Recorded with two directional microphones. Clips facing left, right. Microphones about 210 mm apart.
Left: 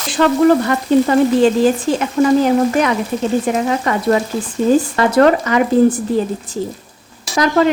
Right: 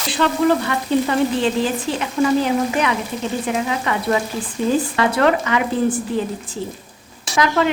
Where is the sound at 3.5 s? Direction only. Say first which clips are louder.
Left 4 dB; 45° left (ahead or behind).